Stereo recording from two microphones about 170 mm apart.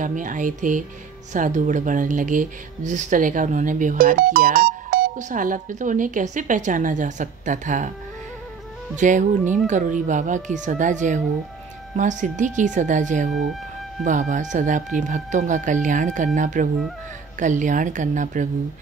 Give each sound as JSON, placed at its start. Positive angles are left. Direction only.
{"t": 0.0, "sound": "speech", "side_deg": -50}
{"t": 8.9, "sound": "speech", "side_deg": -45}
{"t": 13.3, "sound": "music", "side_deg": 0}
{"t": 14.0, "sound": "speech", "side_deg": -45}